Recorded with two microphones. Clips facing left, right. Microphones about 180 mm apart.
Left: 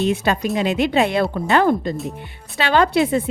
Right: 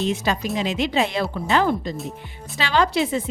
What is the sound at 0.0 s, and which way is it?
Speech, 60° left (ahead or behind).